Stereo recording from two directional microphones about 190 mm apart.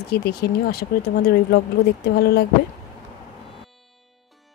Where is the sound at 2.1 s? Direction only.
55° left (ahead or behind).